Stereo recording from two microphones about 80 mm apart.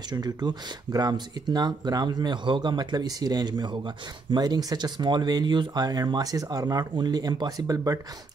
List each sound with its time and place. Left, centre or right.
0.1 s speech: right